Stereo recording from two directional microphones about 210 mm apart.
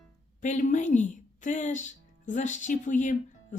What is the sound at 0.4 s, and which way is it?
Speech, 35° left (ahead or behind).